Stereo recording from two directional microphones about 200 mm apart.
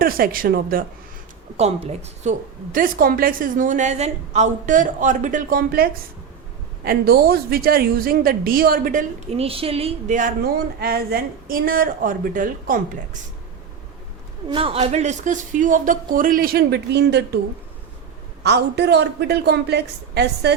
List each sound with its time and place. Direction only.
0.0 s speech: 45° right (ahead or behind)
1.5 s a woman's voice: 35° right (ahead or behind)
2.7 s a woman's voice: 45° right (ahead or behind)
14.5 s a woman's voice: 30° right (ahead or behind); by 17.4 s 55° right (ahead or behind)
18.4 s a woman's voice: 55° right (ahead or behind)